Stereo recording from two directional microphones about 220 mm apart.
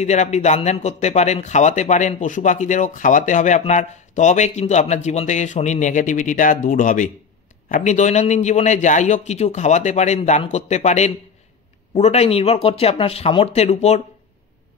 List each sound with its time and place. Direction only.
0.0 s a man's voice: 30° left (ahead or behind)